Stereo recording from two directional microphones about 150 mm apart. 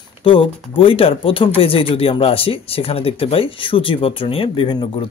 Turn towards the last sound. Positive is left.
turn(degrees=35)  # may be behind; listen again after turning